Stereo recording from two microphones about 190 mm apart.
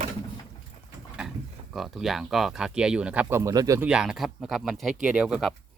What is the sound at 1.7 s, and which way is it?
Speech, centre (ahead or behind).